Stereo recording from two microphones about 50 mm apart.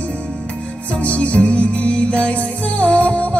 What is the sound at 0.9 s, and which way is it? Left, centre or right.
Music, left.